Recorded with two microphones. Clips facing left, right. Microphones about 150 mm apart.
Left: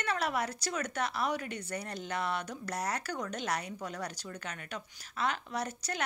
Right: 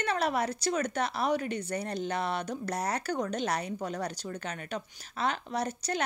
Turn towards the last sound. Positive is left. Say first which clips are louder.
# right 4 dB
turn(degrees=-25)  # may be behind; listen again after turning